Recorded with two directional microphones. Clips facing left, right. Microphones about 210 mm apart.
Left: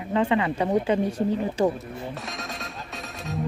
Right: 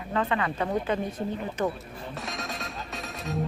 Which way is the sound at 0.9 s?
30° left (ahead or behind).